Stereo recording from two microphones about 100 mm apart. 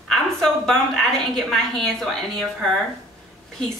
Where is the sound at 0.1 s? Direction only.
5° left (ahead or behind).